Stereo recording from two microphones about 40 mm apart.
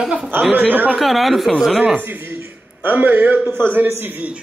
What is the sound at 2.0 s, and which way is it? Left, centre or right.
Speech, right.